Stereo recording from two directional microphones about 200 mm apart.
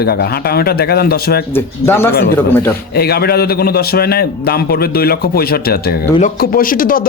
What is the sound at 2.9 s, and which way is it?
A man's voice, 50° left (ahead or behind).